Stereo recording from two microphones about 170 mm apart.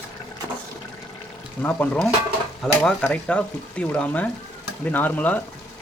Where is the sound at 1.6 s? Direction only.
10° left (ahead or behind).